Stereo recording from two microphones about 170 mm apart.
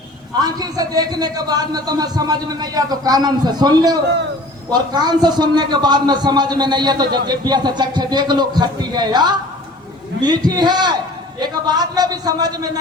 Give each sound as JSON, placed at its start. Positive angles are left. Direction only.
{"t": 0.3, "sound": "a man's voice", "side_deg": -25}